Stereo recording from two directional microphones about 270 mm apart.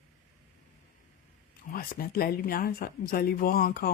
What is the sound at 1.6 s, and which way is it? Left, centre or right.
Speech, left.